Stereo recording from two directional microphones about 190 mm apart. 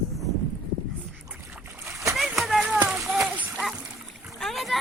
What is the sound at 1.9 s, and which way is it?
Splash, 15° right (ahead or behind).